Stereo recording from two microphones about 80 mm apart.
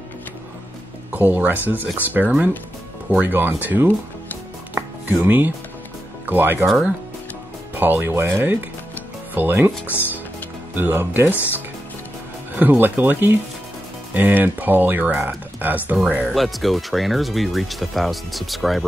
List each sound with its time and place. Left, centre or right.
1.1 s speech: right
5.2 s speech: right
7.7 s speech: right
16.3 s speech: centre